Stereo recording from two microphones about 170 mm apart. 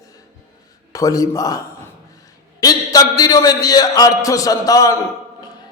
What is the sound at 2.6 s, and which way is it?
A man's voice, 20° left (ahead or behind).